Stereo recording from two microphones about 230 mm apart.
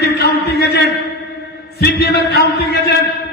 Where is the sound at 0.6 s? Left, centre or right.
Left.